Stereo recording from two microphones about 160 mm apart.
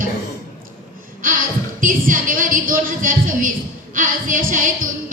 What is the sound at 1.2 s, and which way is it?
A woman's voice, 60° right (ahead or behind).